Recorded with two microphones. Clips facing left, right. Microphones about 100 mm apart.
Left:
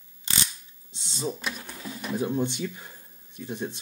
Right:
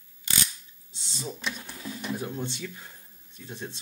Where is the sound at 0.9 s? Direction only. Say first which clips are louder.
Left 6 dB; 20° left (ahead or behind).